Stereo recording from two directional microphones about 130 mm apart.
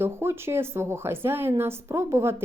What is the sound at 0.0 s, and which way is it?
A woman's voice, 20° right (ahead or behind).